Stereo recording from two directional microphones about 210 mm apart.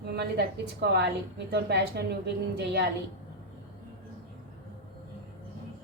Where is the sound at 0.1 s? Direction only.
50° right (ahead or behind).